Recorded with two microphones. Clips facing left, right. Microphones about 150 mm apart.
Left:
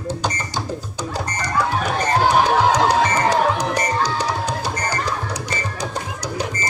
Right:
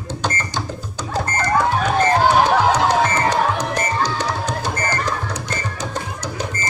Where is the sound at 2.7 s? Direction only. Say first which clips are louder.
Even; 10° left (ahead or behind).